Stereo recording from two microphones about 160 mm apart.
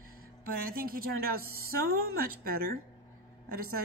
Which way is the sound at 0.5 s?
65° right (ahead or behind).